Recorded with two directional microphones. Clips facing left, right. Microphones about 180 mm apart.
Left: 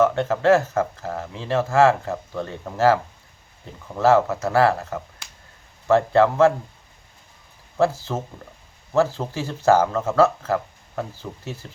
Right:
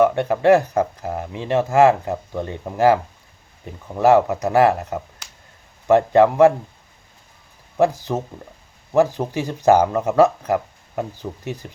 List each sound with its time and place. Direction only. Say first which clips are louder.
0.0 s speech: right 3 dB; 15° right (ahead or behind)
7.8 s speech: right 3 dB; 15° right (ahead or behind)